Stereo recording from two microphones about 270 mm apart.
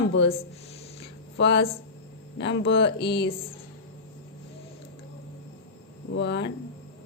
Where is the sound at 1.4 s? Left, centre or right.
Left.